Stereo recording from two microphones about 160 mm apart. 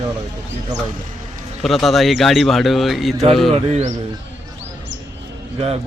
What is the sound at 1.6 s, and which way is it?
A man's voice, centre (ahead or behind).